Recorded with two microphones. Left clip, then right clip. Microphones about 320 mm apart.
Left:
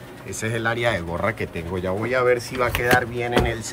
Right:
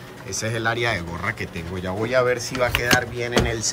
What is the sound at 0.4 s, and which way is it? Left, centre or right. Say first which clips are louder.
Speech: even; centre.